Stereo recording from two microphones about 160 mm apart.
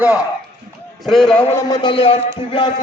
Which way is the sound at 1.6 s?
25° left (ahead or behind).